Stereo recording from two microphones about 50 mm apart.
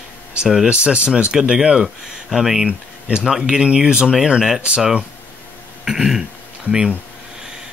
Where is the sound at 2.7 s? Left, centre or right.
Right.